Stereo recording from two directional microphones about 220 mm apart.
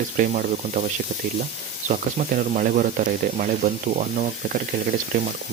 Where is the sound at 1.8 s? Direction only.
35° right (ahead or behind).